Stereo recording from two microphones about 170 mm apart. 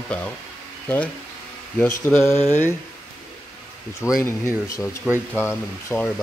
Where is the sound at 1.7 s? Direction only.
10° left (ahead or behind).